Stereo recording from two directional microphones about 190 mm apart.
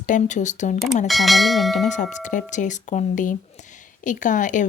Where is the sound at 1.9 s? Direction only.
40° left (ahead or behind).